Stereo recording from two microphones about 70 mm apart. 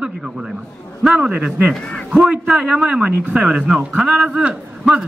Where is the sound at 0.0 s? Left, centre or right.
Centre.